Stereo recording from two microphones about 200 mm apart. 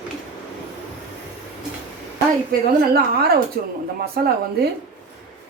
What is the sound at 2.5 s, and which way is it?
A woman's voice, 50° right (ahead or behind).